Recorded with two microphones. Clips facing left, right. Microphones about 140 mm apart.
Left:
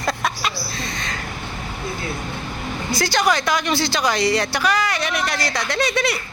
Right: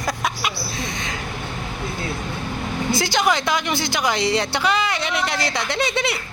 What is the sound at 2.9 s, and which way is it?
A woman's voice, 20° right (ahead or behind).